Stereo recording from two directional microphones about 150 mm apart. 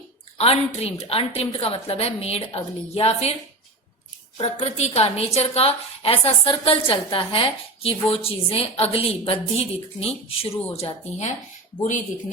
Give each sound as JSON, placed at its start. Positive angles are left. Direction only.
{"t": 0.3, "sound": "a woman's voice", "side_deg": 40}
{"t": 4.4, "sound": "a woman's voice", "side_deg": 45}